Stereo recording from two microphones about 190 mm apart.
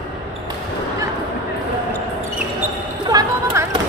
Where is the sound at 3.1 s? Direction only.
20° right (ahead or behind).